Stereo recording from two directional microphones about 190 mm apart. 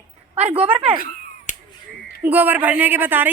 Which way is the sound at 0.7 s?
25° right (ahead or behind).